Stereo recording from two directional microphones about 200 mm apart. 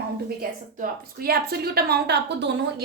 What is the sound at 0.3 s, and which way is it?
A woman's voice, 50° right (ahead or behind).